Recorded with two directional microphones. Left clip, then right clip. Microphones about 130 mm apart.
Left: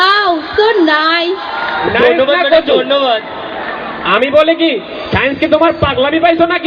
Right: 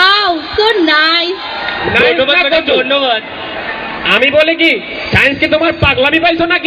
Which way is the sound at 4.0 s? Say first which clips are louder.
Even; 50° left (ahead or behind).